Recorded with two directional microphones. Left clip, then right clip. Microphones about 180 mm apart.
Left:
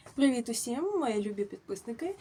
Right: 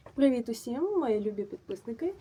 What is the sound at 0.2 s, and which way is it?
A woman's voice, 20° left (ahead or behind).